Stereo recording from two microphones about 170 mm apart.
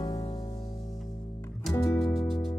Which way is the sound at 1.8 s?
20° left (ahead or behind).